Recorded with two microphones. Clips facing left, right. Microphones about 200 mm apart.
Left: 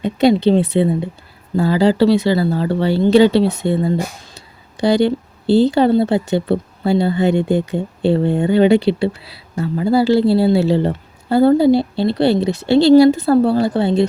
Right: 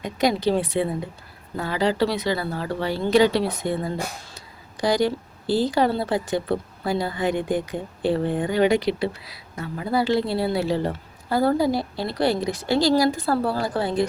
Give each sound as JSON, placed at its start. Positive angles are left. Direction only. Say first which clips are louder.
{"t": 0.0, "sound": "speech", "louder": "left 8 dB", "side_deg": 25}